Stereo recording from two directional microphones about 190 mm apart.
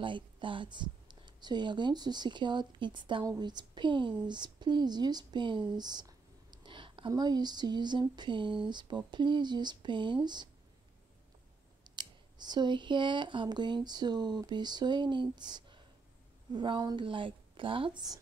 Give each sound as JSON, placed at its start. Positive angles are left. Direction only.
{"t": 0.0, "sound": "speech", "side_deg": -25}
{"t": 11.8, "sound": "speech", "side_deg": -25}